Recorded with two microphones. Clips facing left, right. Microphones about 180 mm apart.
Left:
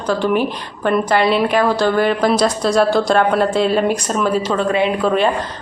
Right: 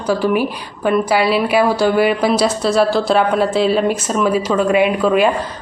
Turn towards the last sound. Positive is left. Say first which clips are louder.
# right 2 dB
turn(degrees=-10)  # may be behind; listen again after turning